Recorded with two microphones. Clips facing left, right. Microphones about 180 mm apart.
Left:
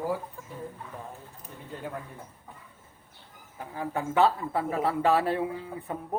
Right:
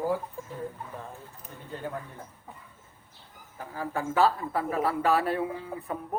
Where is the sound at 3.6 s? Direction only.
20° left (ahead or behind).